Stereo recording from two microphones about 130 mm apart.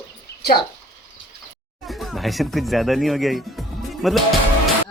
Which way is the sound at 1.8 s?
Centre (ahead or behind).